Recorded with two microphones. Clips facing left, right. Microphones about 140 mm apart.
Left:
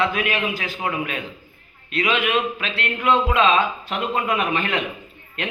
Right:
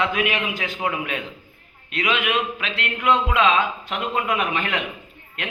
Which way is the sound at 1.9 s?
15° right (ahead or behind).